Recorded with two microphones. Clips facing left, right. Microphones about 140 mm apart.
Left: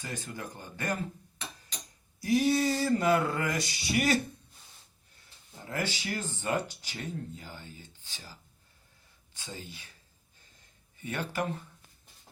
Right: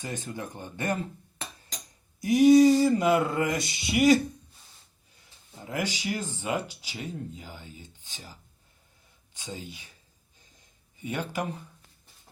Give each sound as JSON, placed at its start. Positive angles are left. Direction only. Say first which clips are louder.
{"t": 0.0, "sound": "speech", "louder": "right 4 dB", "side_deg": -20}
{"t": 2.2, "sound": "speech", "louder": "right 9 dB", "side_deg": -15}
{"t": 5.6, "sound": "speech", "louder": "right 3 dB", "side_deg": -15}
{"t": 11.0, "sound": "speech", "louder": "right 2 dB", "side_deg": -15}